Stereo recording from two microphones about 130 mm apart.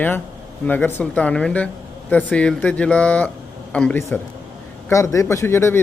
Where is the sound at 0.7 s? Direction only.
15° left (ahead or behind).